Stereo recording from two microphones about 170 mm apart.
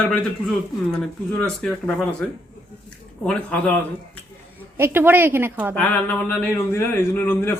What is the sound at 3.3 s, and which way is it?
Speech, 5° left (ahead or behind).